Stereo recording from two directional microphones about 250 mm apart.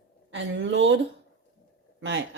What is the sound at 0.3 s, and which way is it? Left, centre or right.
Speech, right.